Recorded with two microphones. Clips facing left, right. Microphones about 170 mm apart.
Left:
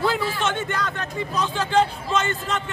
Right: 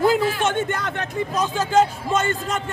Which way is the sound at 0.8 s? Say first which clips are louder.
Right 3 dB; 50° right (ahead or behind).